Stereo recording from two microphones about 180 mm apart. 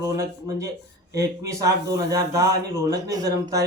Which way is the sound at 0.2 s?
15° right (ahead or behind).